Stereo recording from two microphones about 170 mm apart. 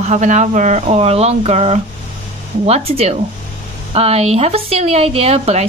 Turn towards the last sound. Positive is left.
turn(degrees=-40)  # may be behind; listen again after turning